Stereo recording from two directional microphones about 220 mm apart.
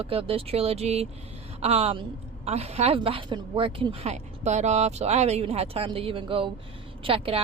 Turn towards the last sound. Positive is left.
turn(degrees=-25)  # may be behind; listen again after turning